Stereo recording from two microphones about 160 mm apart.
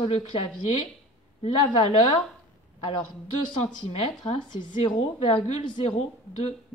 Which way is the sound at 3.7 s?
30° left (ahead or behind).